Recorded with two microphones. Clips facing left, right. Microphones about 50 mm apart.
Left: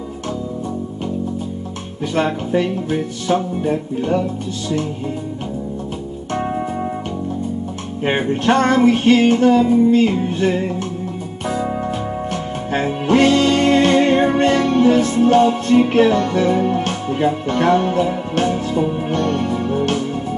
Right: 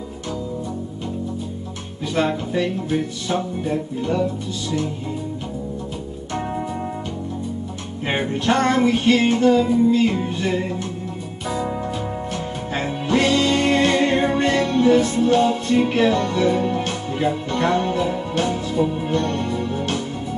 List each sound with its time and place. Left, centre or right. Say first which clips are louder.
2.1 s music: left 3 dB; left
8.0 s music: left 5 dB; left